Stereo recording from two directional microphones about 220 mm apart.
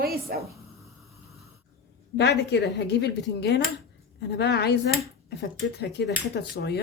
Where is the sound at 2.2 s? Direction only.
50° left (ahead or behind).